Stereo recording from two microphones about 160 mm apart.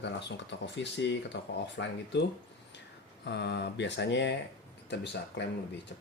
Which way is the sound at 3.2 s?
90° left.